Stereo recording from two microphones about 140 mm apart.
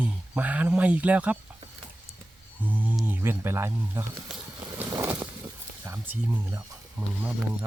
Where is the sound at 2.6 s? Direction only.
10° right (ahead or behind).